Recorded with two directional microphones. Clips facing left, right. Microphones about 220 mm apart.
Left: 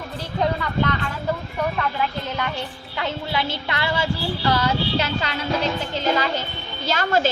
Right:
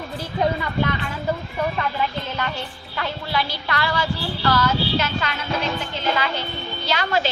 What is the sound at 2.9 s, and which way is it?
A woman's voice, 20° left (ahead or behind).